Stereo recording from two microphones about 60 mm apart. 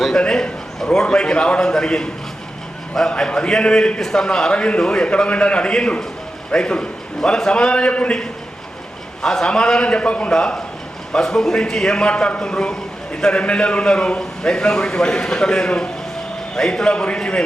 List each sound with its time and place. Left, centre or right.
0.0 s a man's voice: centre